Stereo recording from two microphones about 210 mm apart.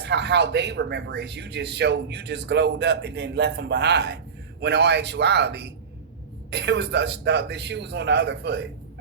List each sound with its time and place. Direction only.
0.0 s a man's voice: 55° right (ahead or behind)